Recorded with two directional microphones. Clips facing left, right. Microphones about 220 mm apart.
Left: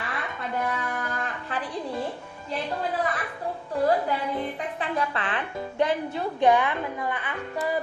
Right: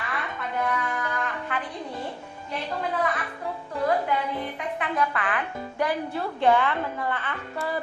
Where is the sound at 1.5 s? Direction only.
30° left (ahead or behind).